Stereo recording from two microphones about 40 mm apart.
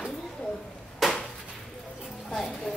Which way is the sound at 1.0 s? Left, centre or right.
Centre.